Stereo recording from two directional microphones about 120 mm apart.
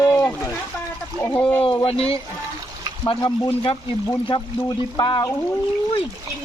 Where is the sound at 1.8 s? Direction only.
55° left (ahead or behind); by 5.3 s 40° left (ahead or behind).